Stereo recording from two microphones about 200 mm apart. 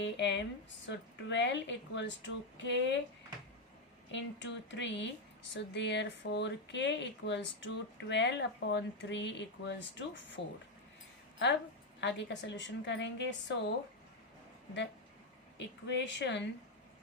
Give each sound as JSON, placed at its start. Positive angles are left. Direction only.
{"t": 0.0, "sound": "speech", "side_deg": 60}
{"t": 4.1, "sound": "speech", "side_deg": 65}
{"t": 11.9, "sound": "speech", "side_deg": 60}
{"t": 15.5, "sound": "speech", "side_deg": 60}